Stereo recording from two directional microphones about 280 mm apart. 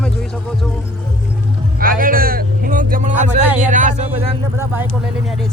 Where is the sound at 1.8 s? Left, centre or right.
Right.